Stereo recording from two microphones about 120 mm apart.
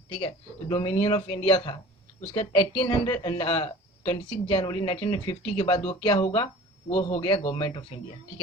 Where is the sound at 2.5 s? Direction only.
45° left (ahead or behind).